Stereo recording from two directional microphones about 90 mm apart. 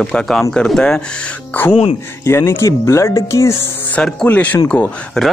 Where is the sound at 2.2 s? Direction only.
25° left (ahead or behind).